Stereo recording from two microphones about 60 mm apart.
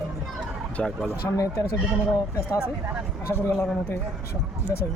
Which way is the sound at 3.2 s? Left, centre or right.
Left.